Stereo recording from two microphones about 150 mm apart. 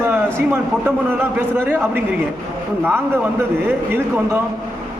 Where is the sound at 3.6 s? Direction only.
15° right (ahead or behind).